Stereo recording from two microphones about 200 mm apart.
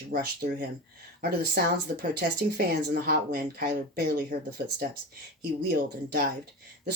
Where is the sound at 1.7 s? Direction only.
50° right (ahead or behind).